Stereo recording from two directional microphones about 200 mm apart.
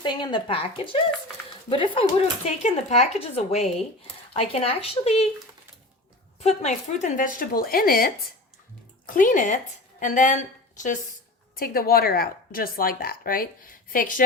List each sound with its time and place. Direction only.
0.0 s speech: 25° left (ahead or behind)
1.7 s a woman's voice: 25° left (ahead or behind)
6.4 s a woman's voice: 35° left (ahead or behind)